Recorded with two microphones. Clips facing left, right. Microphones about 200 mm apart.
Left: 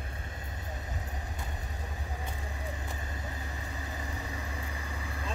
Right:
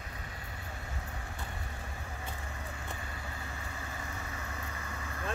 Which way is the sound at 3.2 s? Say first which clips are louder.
Left 2 dB; 20° left (ahead or behind).